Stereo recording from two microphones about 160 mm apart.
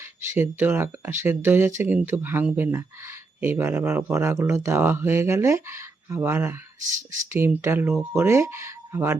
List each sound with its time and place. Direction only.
0.0 s speech: 15° right (ahead or behind)